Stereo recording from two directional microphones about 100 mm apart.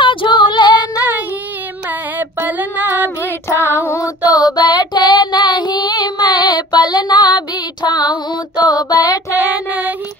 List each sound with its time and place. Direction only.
0.0 s female singing: 55° left (ahead or behind)
1.9 s female singing: 20° right (ahead or behind)
3.3 s music: 25° left (ahead or behind)
3.8 s child singing: 30° left (ahead or behind)
9.3 s child singing: 15° right (ahead or behind)